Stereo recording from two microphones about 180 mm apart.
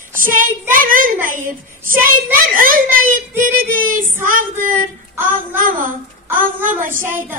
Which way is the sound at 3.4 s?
50° right (ahead or behind).